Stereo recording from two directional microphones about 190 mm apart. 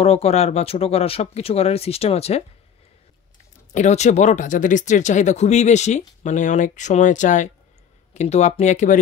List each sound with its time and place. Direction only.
0.0 s speech: 30° left (ahead or behind)
3.7 s speech: 40° left (ahead or behind)